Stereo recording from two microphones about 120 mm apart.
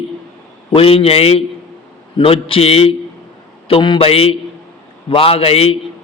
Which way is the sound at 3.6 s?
45° left (ahead or behind).